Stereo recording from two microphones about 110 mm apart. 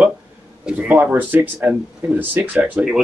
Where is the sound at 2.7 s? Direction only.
5° right (ahead or behind).